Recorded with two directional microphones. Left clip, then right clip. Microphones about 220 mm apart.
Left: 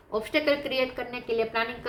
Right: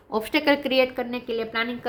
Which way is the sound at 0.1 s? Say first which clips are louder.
Right 3 dB; 45° right (ahead or behind).